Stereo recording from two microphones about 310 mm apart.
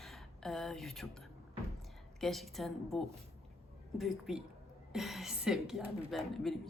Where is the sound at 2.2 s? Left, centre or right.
Centre.